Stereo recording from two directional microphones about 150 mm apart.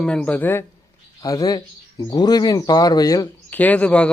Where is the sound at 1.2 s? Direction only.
25° left (ahead or behind); by 4.1 s 10° left (ahead or behind).